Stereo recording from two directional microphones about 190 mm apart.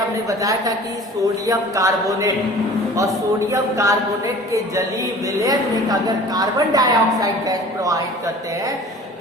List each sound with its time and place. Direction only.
0.3 s speech: 15° right (ahead or behind)
3.5 s speech: 15° right (ahead or behind)
5.5 s a woman's voice: 20° right (ahead or behind)